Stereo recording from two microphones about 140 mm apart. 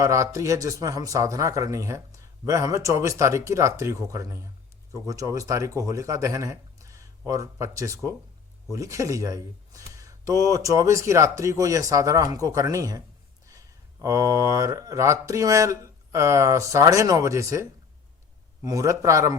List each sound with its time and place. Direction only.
0.0 s a man's voice: 20° right (ahead or behind)
14.0 s a man's voice: 25° right (ahead or behind)